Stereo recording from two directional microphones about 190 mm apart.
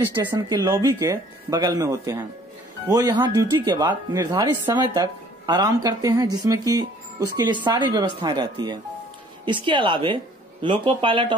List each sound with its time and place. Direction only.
0.0 s a woman's voice: 15° right (ahead or behind)